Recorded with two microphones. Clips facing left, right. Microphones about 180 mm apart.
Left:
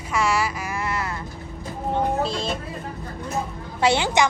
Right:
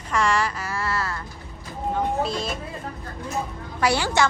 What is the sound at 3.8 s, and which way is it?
Speech, 20° left (ahead or behind).